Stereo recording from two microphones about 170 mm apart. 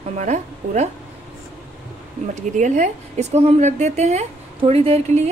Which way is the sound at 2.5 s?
45° right (ahead or behind).